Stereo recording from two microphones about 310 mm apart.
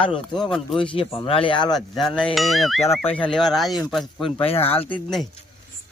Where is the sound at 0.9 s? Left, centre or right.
Centre.